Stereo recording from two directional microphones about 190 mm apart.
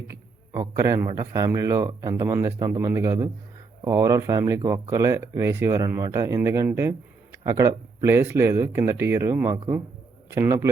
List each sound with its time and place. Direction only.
0.1 s speech: 15° right (ahead or behind)